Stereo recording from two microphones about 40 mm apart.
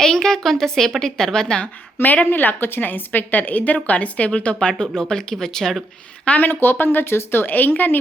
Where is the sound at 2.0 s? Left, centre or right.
Left.